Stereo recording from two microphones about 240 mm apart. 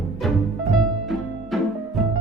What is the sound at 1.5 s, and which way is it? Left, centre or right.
Music, centre.